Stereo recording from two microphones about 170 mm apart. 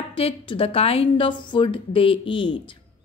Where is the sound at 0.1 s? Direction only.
35° left (ahead or behind).